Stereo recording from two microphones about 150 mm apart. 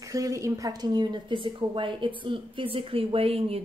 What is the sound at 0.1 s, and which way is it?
Speech, 20° right (ahead or behind).